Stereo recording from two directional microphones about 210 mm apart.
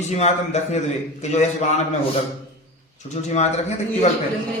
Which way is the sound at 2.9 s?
35° left (ahead or behind).